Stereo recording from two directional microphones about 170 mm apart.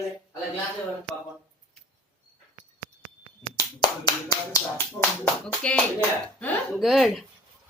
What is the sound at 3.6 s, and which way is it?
Finger snapping, 25° left (ahead or behind).